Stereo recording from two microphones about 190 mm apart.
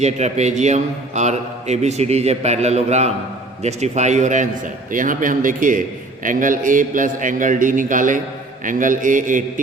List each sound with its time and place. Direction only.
0.0 s a man's voice: 35° right (ahead or behind)